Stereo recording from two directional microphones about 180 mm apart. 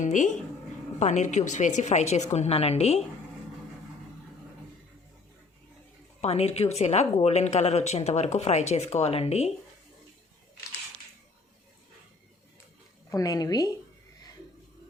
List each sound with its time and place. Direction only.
0.0 s speech: 45° left (ahead or behind)
6.2 s speech: 35° left (ahead or behind)
13.1 s a woman's voice: 20° left (ahead or behind)